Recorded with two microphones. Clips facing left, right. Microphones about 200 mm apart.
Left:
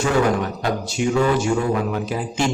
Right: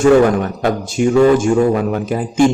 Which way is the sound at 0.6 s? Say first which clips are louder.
Right 6 dB; 50° right (ahead or behind).